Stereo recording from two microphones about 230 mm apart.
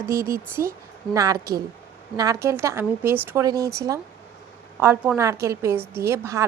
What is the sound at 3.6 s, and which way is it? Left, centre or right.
Speech, right.